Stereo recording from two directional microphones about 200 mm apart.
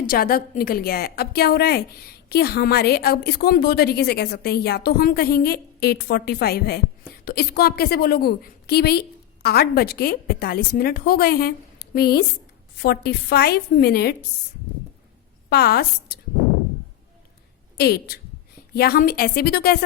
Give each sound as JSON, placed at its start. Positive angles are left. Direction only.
{"t": 0.1, "sound": "a woman's voice", "side_deg": 45}
{"t": 15.4, "sound": "a woman's voice", "side_deg": 50}
{"t": 17.7, "sound": "a woman's voice", "side_deg": 55}